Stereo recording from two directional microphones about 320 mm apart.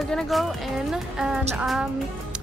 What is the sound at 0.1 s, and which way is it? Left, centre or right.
Speech, centre.